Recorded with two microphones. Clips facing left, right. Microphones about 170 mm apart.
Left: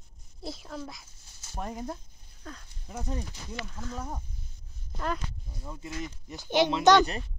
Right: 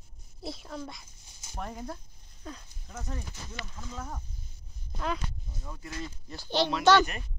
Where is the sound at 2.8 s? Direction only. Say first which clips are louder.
Left 5 dB; 15° left (ahead or behind).